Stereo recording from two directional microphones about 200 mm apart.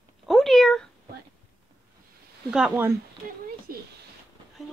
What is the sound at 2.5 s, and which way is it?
Speech, 5° right (ahead or behind).